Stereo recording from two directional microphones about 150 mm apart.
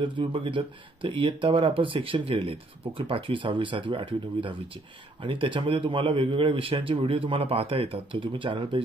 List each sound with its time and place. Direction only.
0.0 s speech: 35° right (ahead or behind)